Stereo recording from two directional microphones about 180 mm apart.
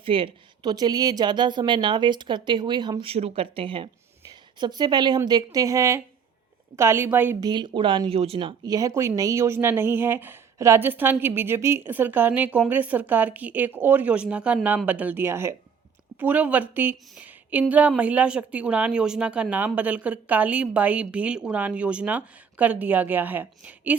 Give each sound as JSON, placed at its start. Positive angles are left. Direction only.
{"t": 0.0, "sound": "a woman's voice", "side_deg": -30}
{"t": 7.4, "sound": "a woman's voice", "side_deg": -25}